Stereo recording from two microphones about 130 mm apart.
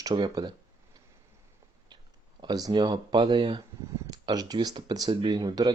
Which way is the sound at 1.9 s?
35° right (ahead or behind).